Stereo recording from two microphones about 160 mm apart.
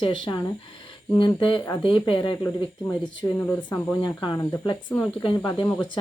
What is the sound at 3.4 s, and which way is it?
Speech, 10° left (ahead or behind).